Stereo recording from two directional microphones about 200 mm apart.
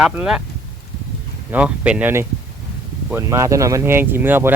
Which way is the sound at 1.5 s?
5° right (ahead or behind).